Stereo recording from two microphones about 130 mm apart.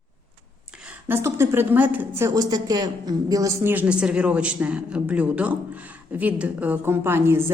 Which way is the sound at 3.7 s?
10° right (ahead or behind).